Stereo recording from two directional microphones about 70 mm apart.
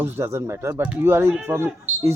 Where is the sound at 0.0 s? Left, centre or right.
Right.